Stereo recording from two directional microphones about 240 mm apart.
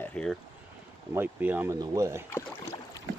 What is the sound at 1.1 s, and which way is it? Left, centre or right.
Speech, centre.